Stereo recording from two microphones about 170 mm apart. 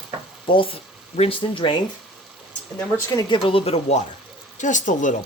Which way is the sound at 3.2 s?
25° left (ahead or behind).